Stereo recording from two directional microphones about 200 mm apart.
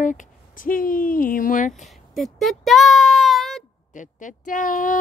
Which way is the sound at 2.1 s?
Centre (ahead or behind).